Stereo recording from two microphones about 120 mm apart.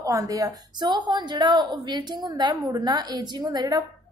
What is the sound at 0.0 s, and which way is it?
A woman's voice, 30° right (ahead or behind).